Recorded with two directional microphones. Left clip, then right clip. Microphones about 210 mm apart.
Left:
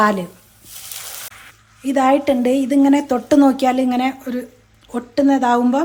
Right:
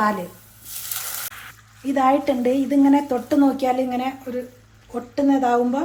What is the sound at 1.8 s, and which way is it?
Speech, 30° left (ahead or behind).